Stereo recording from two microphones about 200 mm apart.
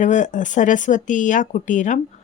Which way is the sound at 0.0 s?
40° left (ahead or behind).